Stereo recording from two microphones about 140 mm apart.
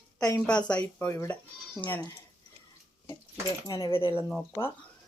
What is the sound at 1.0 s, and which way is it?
Speech, 20° left (ahead or behind).